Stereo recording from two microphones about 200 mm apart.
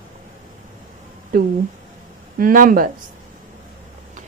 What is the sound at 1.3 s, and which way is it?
A woman's voice, 45° right (ahead or behind).